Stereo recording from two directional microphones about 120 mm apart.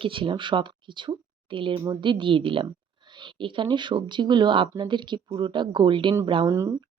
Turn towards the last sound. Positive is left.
turn(degrees=-20)  # may be behind; listen again after turning